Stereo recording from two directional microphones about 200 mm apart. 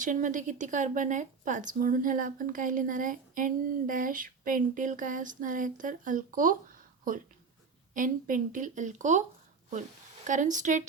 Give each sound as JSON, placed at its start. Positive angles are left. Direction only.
{"t": 0.0, "sound": "speech", "side_deg": -40}
{"t": 10.2, "sound": "speech", "side_deg": -40}